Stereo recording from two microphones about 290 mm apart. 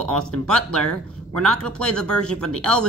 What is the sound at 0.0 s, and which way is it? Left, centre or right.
Speech, centre.